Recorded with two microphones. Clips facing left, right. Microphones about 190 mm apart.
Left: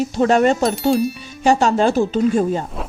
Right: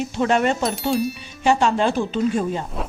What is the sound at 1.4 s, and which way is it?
Speech, 40° left (ahead or behind).